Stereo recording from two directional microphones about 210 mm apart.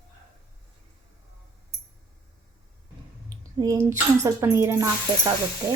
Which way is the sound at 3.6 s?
15° right (ahead or behind).